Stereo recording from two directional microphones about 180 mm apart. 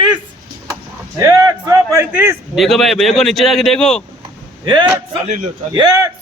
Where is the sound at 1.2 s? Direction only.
20° right (ahead or behind).